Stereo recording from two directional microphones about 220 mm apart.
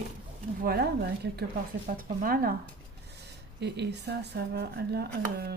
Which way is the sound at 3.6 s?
50° right (ahead or behind).